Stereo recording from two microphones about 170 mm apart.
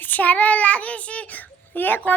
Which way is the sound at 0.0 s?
10° left (ahead or behind).